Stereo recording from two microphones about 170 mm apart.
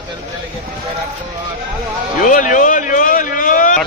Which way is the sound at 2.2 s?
50° left (ahead or behind).